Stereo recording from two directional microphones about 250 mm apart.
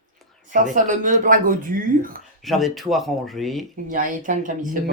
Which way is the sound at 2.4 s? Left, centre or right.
Centre.